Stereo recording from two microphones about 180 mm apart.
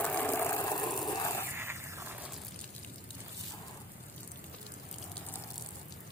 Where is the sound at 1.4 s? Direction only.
15° right (ahead or behind).